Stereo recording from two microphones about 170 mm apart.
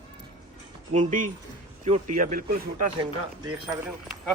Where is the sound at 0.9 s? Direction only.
45° right (ahead or behind).